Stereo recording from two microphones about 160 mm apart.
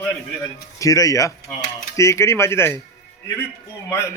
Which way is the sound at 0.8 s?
20° left (ahead or behind).